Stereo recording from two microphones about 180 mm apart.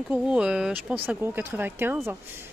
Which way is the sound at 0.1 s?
5° right (ahead or behind).